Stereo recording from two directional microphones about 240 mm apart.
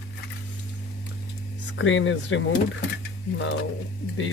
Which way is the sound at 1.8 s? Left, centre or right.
Left.